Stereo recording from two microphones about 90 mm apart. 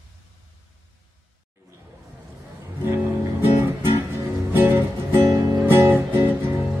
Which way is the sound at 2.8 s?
25° right (ahead or behind).